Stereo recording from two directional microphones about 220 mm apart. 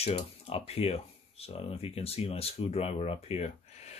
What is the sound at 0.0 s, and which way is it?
Speech, 25° left (ahead or behind).